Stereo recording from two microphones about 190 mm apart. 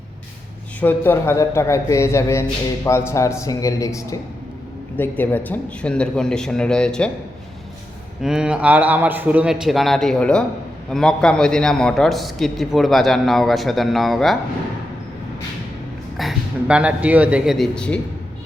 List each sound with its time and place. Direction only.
0.8 s a man's voice: 10° left (ahead or behind)
8.2 s a man's voice: 5° right (ahead or behind)
16.1 s a man's voice: 5° right (ahead or behind)